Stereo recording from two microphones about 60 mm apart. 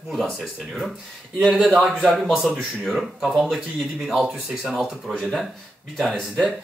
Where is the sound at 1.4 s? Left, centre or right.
Centre.